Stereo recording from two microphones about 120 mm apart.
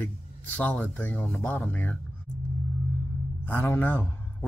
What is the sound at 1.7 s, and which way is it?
Speech, 15° left (ahead or behind).